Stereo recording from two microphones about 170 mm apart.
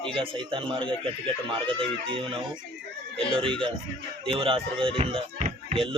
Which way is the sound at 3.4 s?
30° right (ahead or behind).